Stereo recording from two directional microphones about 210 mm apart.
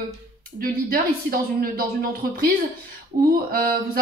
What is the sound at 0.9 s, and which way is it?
Speech, 45° right (ahead or behind).